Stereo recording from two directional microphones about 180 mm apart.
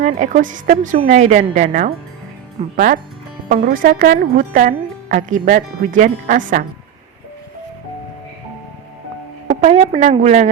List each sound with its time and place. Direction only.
0.2 s speech: 45° right (ahead or behind)
9.5 s a woman's voice: 40° right (ahead or behind)